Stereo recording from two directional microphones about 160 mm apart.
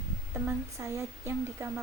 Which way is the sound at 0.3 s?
15° right (ahead or behind).